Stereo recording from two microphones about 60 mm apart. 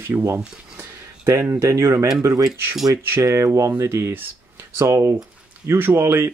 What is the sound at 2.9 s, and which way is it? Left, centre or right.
Speech, right.